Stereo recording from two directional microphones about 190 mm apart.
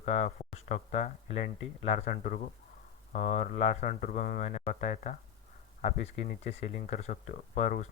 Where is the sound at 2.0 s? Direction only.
50° left (ahead or behind).